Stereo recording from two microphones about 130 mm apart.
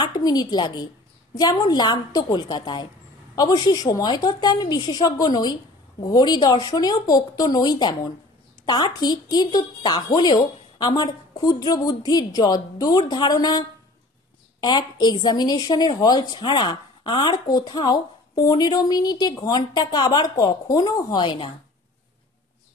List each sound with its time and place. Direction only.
0.0 s a woman's voice: 30° left (ahead or behind)